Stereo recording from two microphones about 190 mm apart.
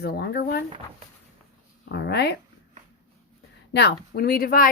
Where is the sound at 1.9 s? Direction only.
60° left (ahead or behind).